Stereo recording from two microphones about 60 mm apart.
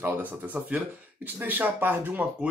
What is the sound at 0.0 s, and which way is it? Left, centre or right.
Speech, right.